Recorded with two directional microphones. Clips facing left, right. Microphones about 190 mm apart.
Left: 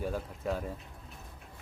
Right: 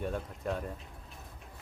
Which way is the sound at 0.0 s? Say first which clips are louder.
Left 1 dB; centre (ahead or behind).